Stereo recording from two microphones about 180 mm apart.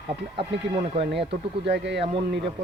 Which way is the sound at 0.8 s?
35° right (ahead or behind).